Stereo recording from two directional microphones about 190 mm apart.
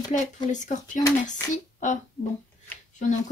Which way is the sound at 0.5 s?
40° left (ahead or behind).